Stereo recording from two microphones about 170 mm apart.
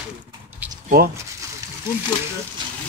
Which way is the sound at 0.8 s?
65° right (ahead or behind).